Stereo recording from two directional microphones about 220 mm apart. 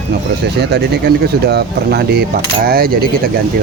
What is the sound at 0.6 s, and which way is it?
Speech, 50° right (ahead or behind).